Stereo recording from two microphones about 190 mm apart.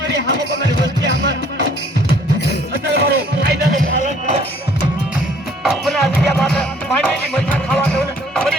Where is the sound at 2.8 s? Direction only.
60° right (ahead or behind).